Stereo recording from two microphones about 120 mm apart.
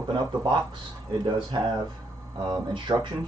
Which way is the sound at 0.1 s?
40° right (ahead or behind).